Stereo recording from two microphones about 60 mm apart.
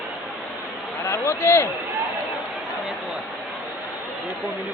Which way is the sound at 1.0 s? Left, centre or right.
Left.